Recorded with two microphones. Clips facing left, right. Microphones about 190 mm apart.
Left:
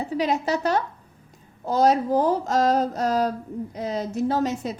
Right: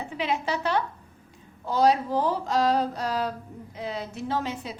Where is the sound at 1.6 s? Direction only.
45° left (ahead or behind).